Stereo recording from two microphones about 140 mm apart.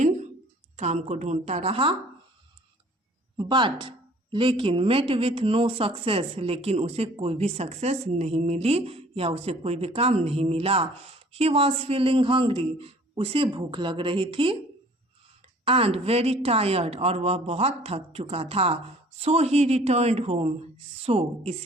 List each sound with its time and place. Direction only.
0.8 s a woman's voice: 55° right (ahead or behind); by 2.0 s 40° right (ahead or behind)
3.3 s a man's voice: 35° right (ahead or behind)
15.6 s speech: 45° right (ahead or behind)